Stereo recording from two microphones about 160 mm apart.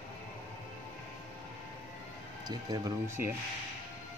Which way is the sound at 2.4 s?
25° right (ahead or behind).